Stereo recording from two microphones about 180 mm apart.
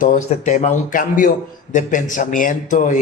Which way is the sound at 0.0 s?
45° left (ahead or behind).